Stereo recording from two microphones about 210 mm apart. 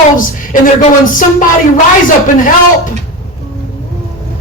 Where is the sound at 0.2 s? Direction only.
40° left (ahead or behind).